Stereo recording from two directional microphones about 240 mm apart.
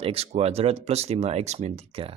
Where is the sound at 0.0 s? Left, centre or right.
Right.